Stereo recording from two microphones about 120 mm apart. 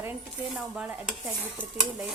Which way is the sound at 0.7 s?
10° right (ahead or behind).